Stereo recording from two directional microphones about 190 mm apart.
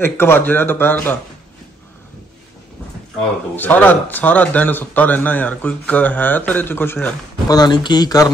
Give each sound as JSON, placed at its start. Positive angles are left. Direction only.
{"t": 0.0, "sound": "speech", "side_deg": 10}
{"t": 3.5, "sound": "speech", "side_deg": 10}